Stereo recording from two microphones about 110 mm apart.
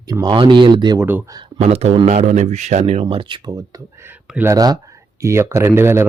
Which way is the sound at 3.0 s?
50° right (ahead or behind).